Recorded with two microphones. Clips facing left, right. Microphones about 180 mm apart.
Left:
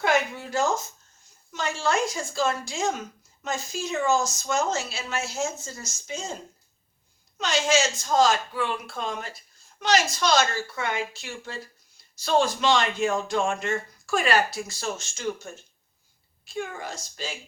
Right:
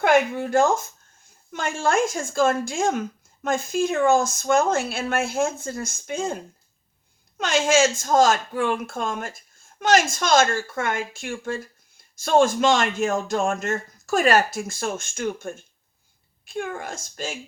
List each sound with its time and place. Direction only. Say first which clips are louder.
0.0 s speech: right 6 dB; 55° right (ahead or behind)